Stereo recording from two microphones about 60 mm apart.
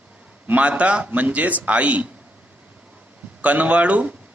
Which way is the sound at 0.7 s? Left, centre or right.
Centre.